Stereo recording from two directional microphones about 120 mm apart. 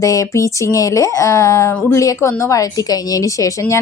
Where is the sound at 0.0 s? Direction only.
25° left (ahead or behind).